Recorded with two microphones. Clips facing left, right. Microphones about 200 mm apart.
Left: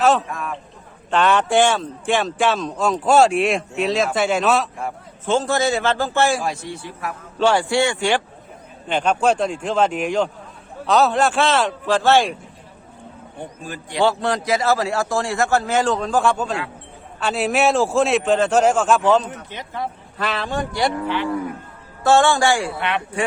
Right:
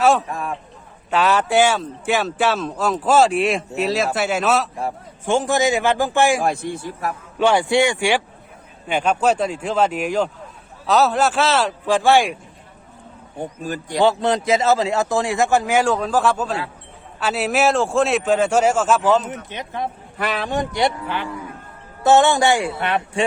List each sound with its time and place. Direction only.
0.0 s speech: 10° right (ahead or behind)
0.3 s speech: 35° right (ahead or behind)
1.1 s speech: 5° right (ahead or behind)
5.2 s speech: 15° right (ahead or behind)
6.4 s speech: 55° right (ahead or behind)
7.3 s speech: 15° right (ahead or behind)
13.4 s speech: 40° right (ahead or behind)
14.0 s speech: 20° right (ahead or behind); by 19.2 s 5° right (ahead or behind)
19.3 s speech: 20° right (ahead or behind)
22.0 s speech: 20° right (ahead or behind)
22.8 s speech: 40° right (ahead or behind)